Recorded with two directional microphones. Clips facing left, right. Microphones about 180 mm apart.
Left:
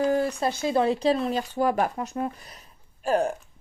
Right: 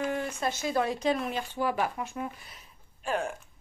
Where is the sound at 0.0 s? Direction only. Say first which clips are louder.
Left 8 dB; 35° left (ahead or behind).